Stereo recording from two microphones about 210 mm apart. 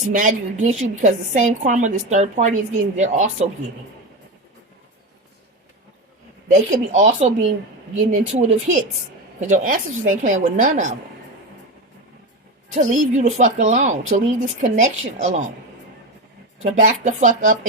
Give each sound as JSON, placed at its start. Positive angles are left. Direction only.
{"t": 0.0, "sound": "speech", "side_deg": -40}
{"t": 6.5, "sound": "speech", "side_deg": -35}
{"t": 12.7, "sound": "speech", "side_deg": -35}
{"t": 16.6, "sound": "speech", "side_deg": -35}